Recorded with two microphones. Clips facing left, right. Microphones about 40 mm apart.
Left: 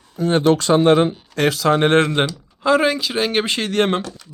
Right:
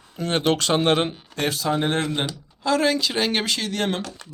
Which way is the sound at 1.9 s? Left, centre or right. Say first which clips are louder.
Left 8 dB; left.